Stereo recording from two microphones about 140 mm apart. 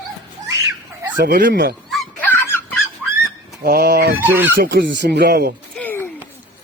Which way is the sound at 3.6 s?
90° right.